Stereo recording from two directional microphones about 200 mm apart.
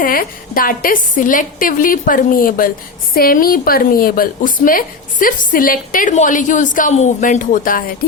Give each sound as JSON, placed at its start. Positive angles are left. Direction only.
{"t": 0.0, "sound": "a woman's voice", "side_deg": 45}